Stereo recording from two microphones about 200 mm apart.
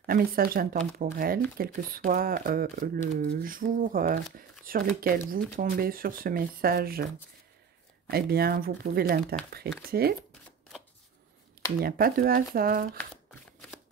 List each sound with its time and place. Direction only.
0.0 s speech: 50° right (ahead or behind)
8.1 s speech: 50° right (ahead or behind)
11.8 s speech: 45° right (ahead or behind)